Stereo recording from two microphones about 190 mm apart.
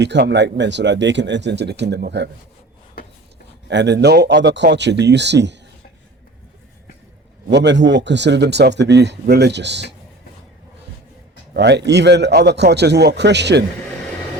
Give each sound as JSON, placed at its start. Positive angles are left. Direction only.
{"t": 0.0, "sound": "speech", "side_deg": -65}
{"t": 3.7, "sound": "speech", "side_deg": -65}
{"t": 7.5, "sound": "speech", "side_deg": -65}
{"t": 11.5, "sound": "speech", "side_deg": -65}